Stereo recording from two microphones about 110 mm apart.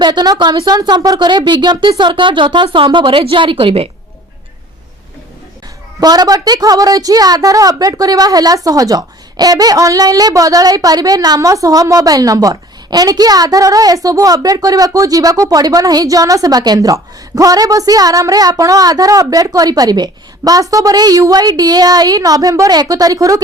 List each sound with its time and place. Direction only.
0.0 s a woman's voice: 40° right (ahead or behind)
6.0 s a woman's voice: 35° right (ahead or behind)